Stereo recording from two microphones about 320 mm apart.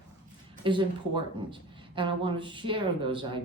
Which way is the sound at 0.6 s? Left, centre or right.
Centre.